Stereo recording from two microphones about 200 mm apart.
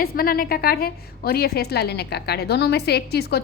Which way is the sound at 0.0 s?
45° left (ahead or behind).